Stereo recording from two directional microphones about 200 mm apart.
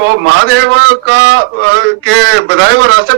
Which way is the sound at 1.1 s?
65° right (ahead or behind).